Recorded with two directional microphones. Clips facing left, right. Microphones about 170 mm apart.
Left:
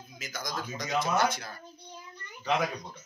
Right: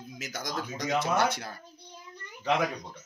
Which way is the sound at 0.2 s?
75° right (ahead or behind).